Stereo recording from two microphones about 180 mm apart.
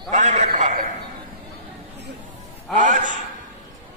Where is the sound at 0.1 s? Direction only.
40° right (ahead or behind).